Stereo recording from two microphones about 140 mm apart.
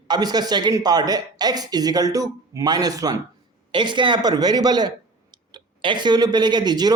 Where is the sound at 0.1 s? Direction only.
30° right (ahead or behind).